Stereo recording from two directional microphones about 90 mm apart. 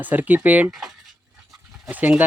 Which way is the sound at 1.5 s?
5° right (ahead or behind).